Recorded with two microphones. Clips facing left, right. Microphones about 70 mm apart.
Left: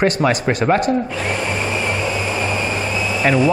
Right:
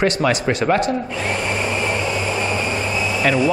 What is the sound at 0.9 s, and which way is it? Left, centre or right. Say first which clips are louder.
Vacuum cleaner: left 2 dB; centre.